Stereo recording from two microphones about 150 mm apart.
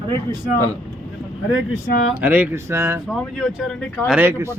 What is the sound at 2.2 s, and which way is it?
Speech, 10° right (ahead or behind).